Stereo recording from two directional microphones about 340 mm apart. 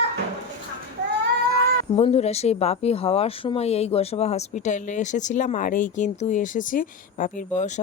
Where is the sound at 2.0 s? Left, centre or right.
Centre.